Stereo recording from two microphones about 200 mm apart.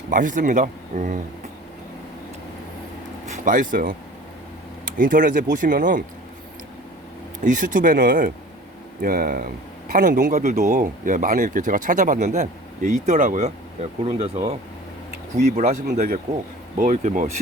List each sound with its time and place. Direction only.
0.1 s speech: 40° right (ahead or behind)
3.2 s speech: 40° right (ahead or behind)
7.4 s speech: 40° right (ahead or behind)
15.5 s speech: 35° right (ahead or behind)